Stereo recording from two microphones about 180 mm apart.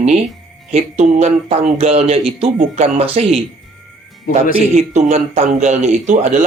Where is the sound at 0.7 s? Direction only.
35° right (ahead or behind).